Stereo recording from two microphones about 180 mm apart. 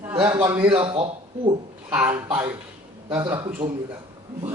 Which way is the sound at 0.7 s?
30° right (ahead or behind).